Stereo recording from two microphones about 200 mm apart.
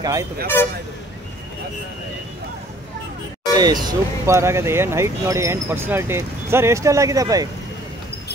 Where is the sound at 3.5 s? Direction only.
20° right (ahead or behind).